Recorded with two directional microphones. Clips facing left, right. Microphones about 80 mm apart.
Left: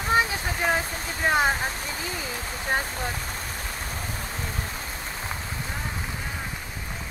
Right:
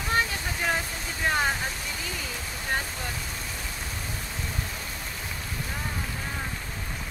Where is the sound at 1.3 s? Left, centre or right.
Left.